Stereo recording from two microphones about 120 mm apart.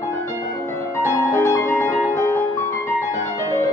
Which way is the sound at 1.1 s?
25° left (ahead or behind).